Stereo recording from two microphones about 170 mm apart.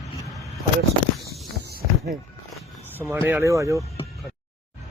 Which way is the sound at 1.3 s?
70° right (ahead or behind).